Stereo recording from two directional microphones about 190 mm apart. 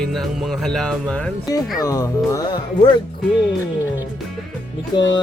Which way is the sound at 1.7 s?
20° left (ahead or behind).